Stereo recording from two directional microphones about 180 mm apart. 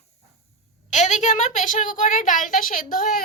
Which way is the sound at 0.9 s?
40° left (ahead or behind).